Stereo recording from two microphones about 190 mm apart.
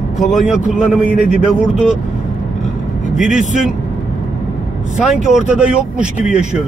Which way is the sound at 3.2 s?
5° right (ahead or behind).